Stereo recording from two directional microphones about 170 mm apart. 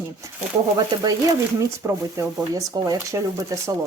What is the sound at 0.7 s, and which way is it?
Speech, 20° right (ahead or behind).